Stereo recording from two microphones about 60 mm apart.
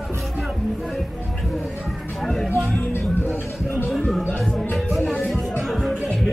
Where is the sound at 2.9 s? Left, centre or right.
Left.